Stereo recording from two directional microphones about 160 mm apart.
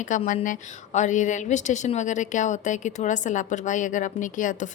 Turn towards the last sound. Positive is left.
turn(degrees=50)  # may be behind; listen again after turning